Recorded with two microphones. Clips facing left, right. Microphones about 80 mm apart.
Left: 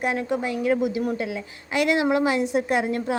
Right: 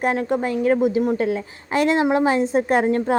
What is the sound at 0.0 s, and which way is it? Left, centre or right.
A woman's voice, right.